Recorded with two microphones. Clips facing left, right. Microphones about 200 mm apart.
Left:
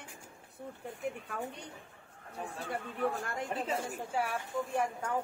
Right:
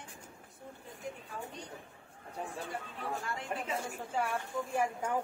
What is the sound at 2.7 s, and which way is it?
Speech, 60° left (ahead or behind).